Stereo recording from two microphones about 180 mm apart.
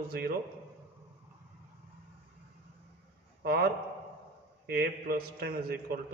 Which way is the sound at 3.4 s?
60° right (ahead or behind).